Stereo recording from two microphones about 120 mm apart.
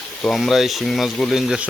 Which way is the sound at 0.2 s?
Centre (ahead or behind).